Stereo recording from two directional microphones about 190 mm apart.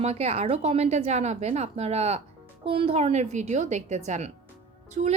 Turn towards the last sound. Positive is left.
turn(degrees=-35)  # may be behind; listen again after turning